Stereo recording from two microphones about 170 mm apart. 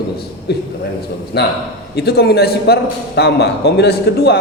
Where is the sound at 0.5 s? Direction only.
70° left (ahead or behind).